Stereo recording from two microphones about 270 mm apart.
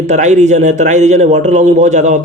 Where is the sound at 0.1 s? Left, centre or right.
Right.